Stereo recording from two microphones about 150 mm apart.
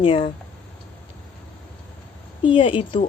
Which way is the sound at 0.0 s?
35° left (ahead or behind).